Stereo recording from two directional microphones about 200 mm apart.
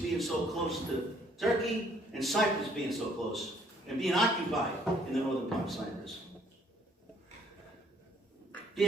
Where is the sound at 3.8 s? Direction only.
Centre (ahead or behind).